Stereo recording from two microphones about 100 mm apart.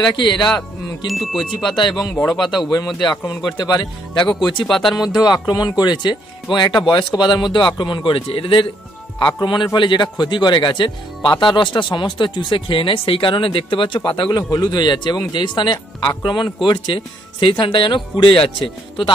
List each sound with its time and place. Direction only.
0.1 s speech: 50° left (ahead or behind)
0.5 s speech: 5° left (ahead or behind)
3.4 s speech: 45° left (ahead or behind)
4.6 s speech: 5° left (ahead or behind)
5.5 s speech: 45° left (ahead or behind); by 8.6 s 60° left (ahead or behind)
9.2 s speech: 45° left (ahead or behind)